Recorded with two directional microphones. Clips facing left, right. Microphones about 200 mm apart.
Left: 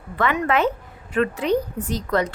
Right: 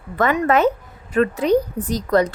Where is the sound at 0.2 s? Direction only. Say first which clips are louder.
Right 4 dB; 40° right (ahead or behind).